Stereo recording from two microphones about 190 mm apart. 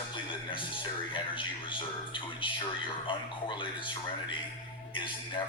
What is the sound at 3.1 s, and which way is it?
Speech, 25° left (ahead or behind).